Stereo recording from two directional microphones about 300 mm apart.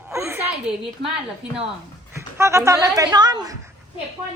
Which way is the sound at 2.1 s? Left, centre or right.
Centre.